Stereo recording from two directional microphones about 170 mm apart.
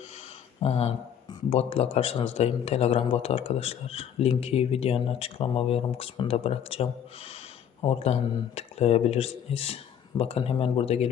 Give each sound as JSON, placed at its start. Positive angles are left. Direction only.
{"t": 0.6, "sound": "speech", "side_deg": 40}